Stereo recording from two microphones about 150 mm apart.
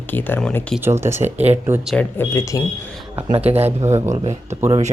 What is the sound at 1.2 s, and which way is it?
Speech, 45° right (ahead or behind).